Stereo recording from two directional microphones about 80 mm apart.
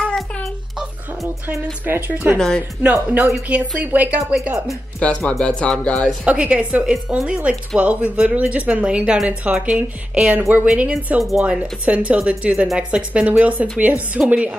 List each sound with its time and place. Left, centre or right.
1.5 s speech: right
2.3 s speech: centre
2.8 s a woman's voice: right
5.0 s music: centre
6.2 s a woman's voice: centre
11.1 s a woman's voice: centre